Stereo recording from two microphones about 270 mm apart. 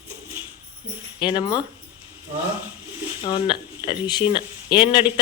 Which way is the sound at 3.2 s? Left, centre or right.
Centre.